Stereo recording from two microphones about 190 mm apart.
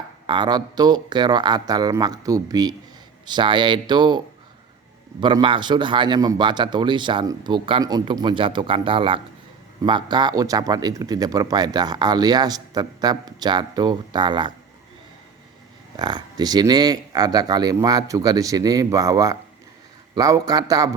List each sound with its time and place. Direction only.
0.3 s a man's voice: 25° right (ahead or behind)
5.2 s a man's voice: 25° right (ahead or behind)
16.0 s a man's voice: 20° right (ahead or behind)